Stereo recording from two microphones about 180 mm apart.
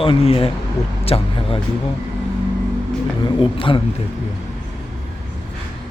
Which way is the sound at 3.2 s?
30° left (ahead or behind).